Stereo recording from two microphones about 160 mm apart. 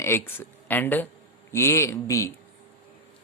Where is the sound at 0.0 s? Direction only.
15° left (ahead or behind).